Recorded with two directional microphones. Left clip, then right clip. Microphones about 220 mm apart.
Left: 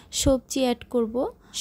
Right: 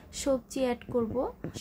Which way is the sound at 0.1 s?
40° left (ahead or behind).